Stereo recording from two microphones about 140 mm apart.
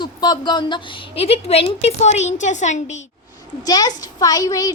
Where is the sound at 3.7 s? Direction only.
30° left (ahead or behind).